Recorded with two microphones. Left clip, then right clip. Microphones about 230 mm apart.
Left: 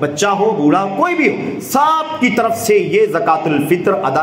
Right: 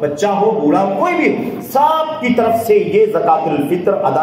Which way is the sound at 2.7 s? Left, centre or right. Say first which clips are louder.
Left 1 dB; left.